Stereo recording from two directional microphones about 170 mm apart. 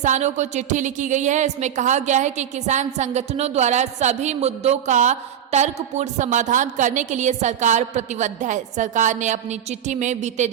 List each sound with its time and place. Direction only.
0.0 s a woman's voice: 45° right (ahead or behind)